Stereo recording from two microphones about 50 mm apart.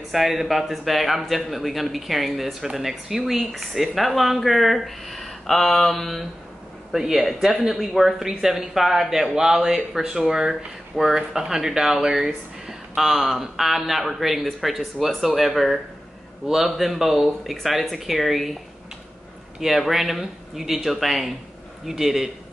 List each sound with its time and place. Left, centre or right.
0.1 s a man's voice: centre
6.9 s a man's voice: centre
19.6 s a man's voice: centre